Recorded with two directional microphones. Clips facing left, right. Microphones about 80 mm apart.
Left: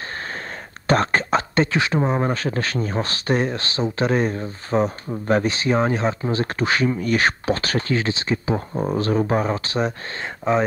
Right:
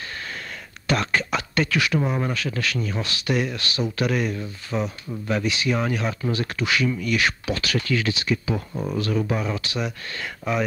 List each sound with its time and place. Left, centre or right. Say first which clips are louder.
0.8 s speech: left 4 dB; left